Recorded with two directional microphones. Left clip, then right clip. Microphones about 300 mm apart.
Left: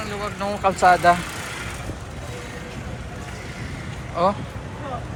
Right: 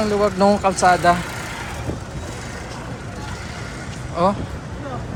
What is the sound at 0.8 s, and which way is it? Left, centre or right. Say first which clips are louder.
Speech: left 2 dB; centre.